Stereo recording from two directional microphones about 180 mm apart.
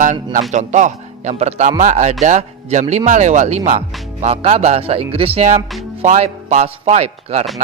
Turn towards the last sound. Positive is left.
turn(degrees=-35)  # may be behind; listen again after turning